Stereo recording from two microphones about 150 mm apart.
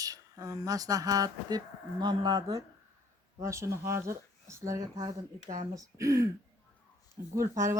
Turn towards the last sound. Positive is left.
turn(degrees=-20)  # may be behind; listen again after turning